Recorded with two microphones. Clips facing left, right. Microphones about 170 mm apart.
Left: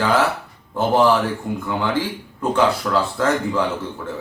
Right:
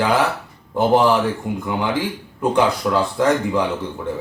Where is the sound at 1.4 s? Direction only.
15° right (ahead or behind).